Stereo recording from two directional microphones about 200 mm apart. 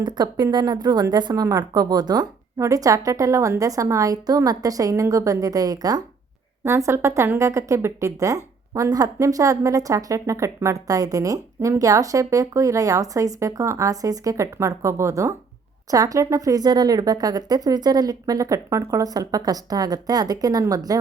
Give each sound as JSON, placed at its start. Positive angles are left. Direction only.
{"t": 0.0, "sound": "a woman's voice", "side_deg": -20}